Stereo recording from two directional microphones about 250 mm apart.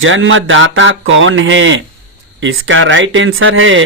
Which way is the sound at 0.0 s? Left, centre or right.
Right.